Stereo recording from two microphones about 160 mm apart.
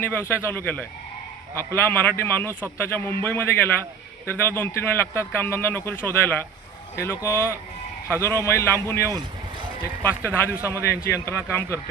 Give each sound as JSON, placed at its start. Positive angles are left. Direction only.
{"t": 0.0, "sound": "a man's voice", "side_deg": 15}